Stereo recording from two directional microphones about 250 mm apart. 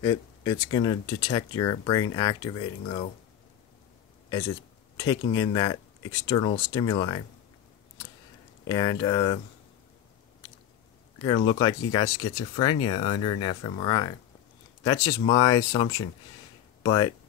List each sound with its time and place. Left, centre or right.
0.0 s speech: centre
4.9 s speech: centre
8.6 s speech: centre
11.1 s speech: centre